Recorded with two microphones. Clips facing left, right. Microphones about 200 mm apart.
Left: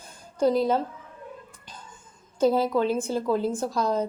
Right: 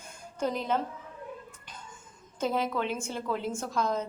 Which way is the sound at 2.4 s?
35° left (ahead or behind).